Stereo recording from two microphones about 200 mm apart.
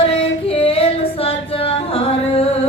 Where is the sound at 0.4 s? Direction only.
30° left (ahead or behind).